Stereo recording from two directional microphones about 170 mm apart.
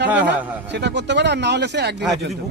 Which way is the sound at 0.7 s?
90° right.